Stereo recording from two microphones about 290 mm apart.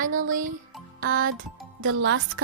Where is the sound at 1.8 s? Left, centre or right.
Right.